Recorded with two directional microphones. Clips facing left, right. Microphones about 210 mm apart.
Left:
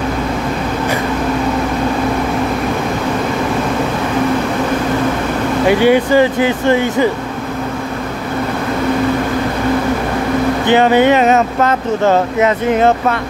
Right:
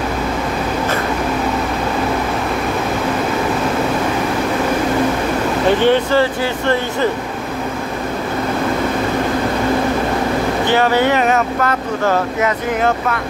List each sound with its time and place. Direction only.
5.7 s speech: 10° left (ahead or behind)
10.7 s speech: 20° left (ahead or behind)